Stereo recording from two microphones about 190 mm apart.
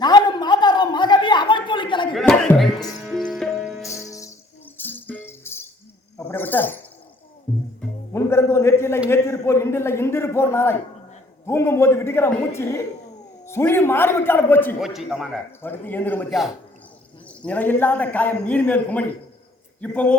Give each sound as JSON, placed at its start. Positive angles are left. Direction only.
{"t": 0.0, "sound": "a sound", "side_deg": 20}
{"t": 2.1, "sound": "music", "side_deg": 5}
{"t": 3.0, "sound": "sitar", "side_deg": 0}
{"t": 4.8, "sound": "music", "side_deg": 10}
{"t": 6.1, "sound": "a sound", "side_deg": 10}
{"t": 8.1, "sound": "a sound", "side_deg": 15}
{"t": 9.0, "sound": "a man's voice", "side_deg": 15}
{"t": 14.8, "sound": "a man's voice", "side_deg": 0}
{"t": 15.6, "sound": "a man's voice", "side_deg": 10}
{"t": 17.2, "sound": "a man's voice", "side_deg": 5}